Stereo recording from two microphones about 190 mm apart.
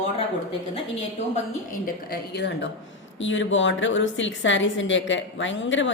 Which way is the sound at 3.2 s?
85° left.